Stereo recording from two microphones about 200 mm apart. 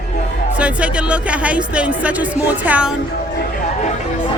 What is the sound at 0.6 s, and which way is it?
Speech, 5° right (ahead or behind).